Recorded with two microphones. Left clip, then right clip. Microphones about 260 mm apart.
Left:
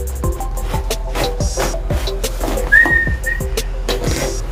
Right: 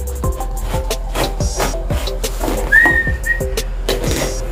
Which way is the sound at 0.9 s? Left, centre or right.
Centre.